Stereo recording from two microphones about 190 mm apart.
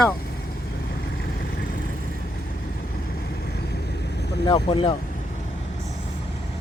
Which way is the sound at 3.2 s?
60° left (ahead or behind).